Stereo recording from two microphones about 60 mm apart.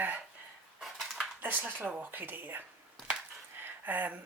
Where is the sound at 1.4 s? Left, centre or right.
Right.